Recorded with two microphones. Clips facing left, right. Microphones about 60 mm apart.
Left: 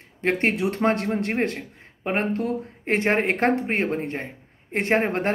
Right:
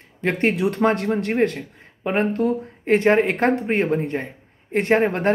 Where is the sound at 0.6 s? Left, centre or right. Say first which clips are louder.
Right 3 dB; centre.